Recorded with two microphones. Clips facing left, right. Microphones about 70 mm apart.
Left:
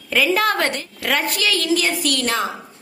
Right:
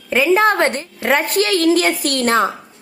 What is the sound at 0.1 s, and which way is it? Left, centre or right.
A woman's voice, right.